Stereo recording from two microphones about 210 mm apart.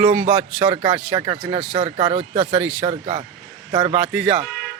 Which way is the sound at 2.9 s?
30° right (ahead or behind).